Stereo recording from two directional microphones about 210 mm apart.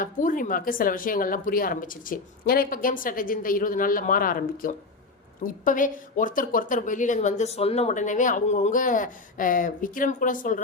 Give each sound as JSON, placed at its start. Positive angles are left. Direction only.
{"t": 0.0, "sound": "a woman's voice", "side_deg": 40}